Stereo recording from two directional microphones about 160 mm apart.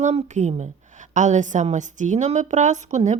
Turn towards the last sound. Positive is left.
turn(degrees=-45)  # may be behind; listen again after turning